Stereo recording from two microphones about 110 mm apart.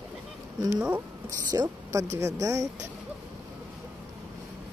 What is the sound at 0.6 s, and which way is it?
Speech, 35° right (ahead or behind).